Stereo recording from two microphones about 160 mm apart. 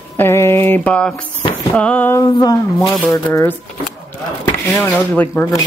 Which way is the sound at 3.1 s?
15° left (ahead or behind).